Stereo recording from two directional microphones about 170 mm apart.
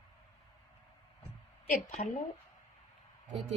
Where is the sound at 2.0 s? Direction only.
50° left (ahead or behind).